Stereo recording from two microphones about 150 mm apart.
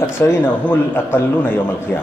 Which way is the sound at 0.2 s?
15° left (ahead or behind).